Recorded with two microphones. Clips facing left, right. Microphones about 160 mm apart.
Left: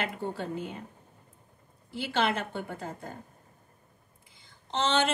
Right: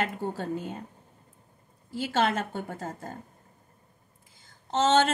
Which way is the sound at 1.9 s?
45° right (ahead or behind).